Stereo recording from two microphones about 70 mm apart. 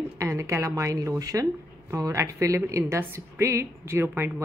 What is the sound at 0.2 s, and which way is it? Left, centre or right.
Speech, right.